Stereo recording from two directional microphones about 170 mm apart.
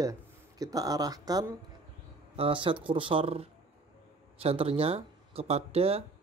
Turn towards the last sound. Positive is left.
turn(degrees=-35)  # may be behind; listen again after turning